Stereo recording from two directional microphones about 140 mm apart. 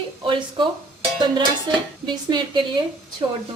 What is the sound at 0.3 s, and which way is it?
Speech, 35° right (ahead or behind).